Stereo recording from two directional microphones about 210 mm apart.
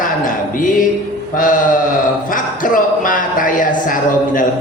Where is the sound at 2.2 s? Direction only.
40° left (ahead or behind).